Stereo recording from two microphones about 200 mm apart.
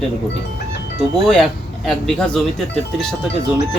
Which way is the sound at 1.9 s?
5° left (ahead or behind).